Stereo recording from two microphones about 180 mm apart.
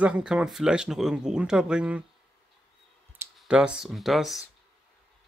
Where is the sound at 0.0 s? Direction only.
5° right (ahead or behind).